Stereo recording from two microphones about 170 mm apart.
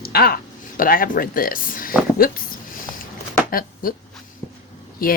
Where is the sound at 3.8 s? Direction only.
55° left (ahead or behind).